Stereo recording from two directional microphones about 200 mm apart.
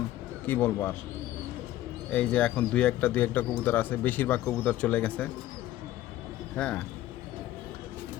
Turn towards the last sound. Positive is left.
turn(degrees=5)  # may be behind; listen again after turning